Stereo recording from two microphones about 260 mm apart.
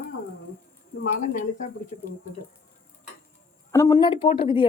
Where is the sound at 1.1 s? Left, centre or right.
Left.